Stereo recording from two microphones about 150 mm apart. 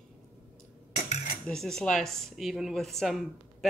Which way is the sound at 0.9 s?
50° left (ahead or behind).